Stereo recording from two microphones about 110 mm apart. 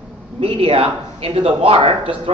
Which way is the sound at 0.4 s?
65° right (ahead or behind).